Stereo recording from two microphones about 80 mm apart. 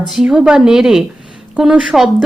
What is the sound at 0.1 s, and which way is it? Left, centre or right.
A woman's voice, centre.